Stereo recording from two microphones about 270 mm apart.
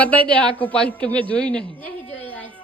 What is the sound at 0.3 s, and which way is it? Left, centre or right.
A woman's voice, centre.